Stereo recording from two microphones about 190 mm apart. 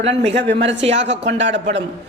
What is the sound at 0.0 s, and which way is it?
Speech, 35° right (ahead or behind).